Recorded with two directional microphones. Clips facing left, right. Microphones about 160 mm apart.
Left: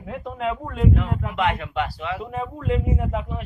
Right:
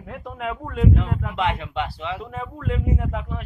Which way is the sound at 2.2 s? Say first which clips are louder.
Left 3 dB; 5° left (ahead or behind).